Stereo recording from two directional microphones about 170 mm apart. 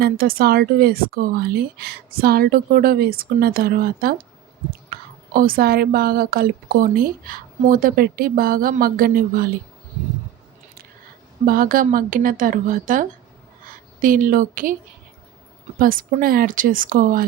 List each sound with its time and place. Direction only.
0.0 s speech: 60° right (ahead or behind)
11.4 s a woman's voice: 55° right (ahead or behind)
15.8 s speech: 55° right (ahead or behind)